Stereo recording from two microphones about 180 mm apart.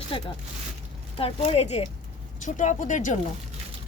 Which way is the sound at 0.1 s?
30° left (ahead or behind).